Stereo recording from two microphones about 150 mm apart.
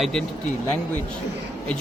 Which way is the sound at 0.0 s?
5° left (ahead or behind).